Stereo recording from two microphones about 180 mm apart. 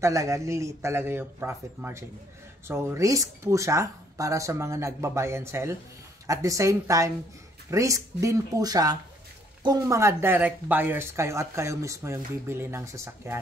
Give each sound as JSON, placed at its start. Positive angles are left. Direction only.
{"t": 0.0, "sound": "speech", "side_deg": -15}